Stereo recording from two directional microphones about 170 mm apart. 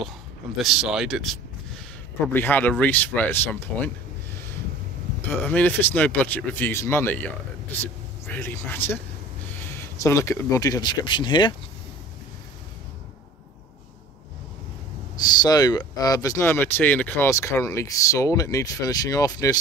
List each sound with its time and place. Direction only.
0.6 s speech: centre (ahead or behind)
2.3 s speech: 10° left (ahead or behind)
5.3 s speech: 10° left (ahead or behind); by 11.5 s 30° left (ahead or behind)
15.1 s speech: 25° left (ahead or behind)